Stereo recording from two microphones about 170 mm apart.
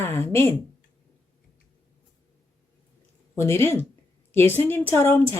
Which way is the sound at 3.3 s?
15° left (ahead or behind).